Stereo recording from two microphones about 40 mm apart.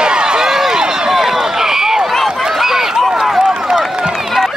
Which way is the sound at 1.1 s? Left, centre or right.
Centre.